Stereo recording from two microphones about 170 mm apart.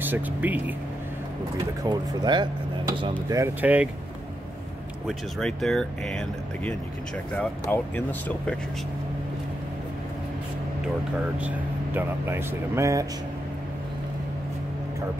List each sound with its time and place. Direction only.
0.0 s speech: 10° right (ahead or behind)
1.9 s speech: 25° right (ahead or behind)
3.6 s speech: 10° right (ahead or behind)
5.0 s speech: centre (ahead or behind)
11.3 s speech: 10° right (ahead or behind)